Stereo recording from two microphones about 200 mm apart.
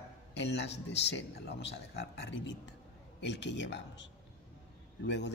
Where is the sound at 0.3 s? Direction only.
60° left (ahead or behind).